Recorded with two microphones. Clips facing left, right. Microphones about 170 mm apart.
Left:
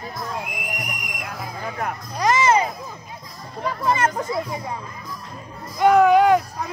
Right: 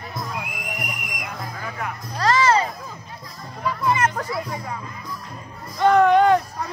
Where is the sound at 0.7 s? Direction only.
Centre (ahead or behind).